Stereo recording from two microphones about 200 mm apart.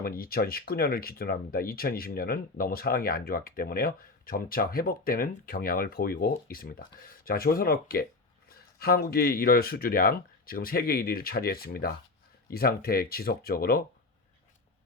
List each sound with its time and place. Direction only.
0.0 s speech: 45° left (ahead or behind)